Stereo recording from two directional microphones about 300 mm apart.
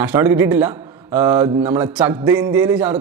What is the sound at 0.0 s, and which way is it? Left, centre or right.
A man's voice, centre.